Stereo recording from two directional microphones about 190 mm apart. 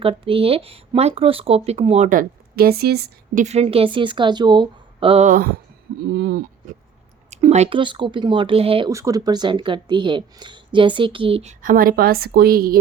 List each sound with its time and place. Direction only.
0.0 s speech: 30° right (ahead or behind); by 3.4 s 55° right (ahead or behind)
3.4 s speech: 35° right (ahead or behind)
5.3 s speech: 50° right (ahead or behind)
7.3 s speech: 35° right (ahead or behind)
8.9 s speech: 15° right (ahead or behind)
11.6 s speech: 45° right (ahead or behind)